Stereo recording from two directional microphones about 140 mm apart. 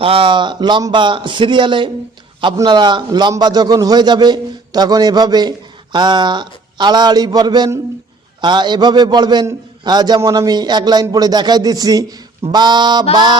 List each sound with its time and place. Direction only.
0.0 s a man's voice: 40° right (ahead or behind)